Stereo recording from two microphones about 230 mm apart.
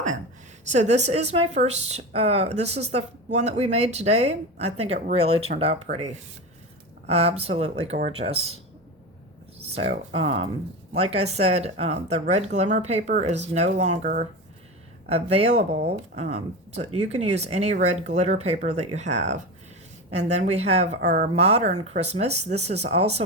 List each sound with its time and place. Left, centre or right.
0.6 s a woman's voice: right
9.7 s a woman's voice: right